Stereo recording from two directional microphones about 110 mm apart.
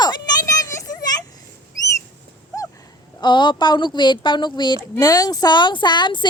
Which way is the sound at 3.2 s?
45° left (ahead or behind).